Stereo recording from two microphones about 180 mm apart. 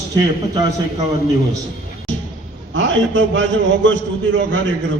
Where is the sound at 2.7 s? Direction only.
90° right.